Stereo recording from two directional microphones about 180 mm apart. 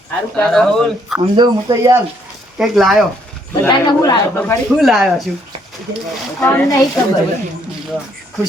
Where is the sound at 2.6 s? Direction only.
Centre (ahead or behind).